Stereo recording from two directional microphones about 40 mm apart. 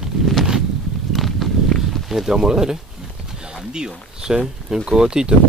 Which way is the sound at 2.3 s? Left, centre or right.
Centre.